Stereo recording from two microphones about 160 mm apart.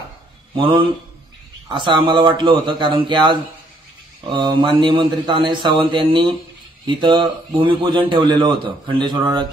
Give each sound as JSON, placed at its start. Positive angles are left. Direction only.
{"t": 0.6, "sound": "a man's voice", "side_deg": -30}